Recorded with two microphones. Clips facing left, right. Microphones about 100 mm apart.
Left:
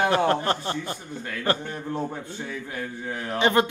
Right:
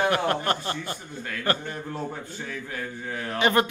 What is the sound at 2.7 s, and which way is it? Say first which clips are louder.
Speech: left 1 dB; 15° left (ahead or behind).